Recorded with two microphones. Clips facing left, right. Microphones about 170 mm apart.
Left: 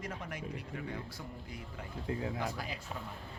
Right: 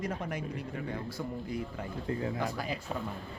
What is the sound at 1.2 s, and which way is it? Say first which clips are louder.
Speech: right 9 dB; 85° right.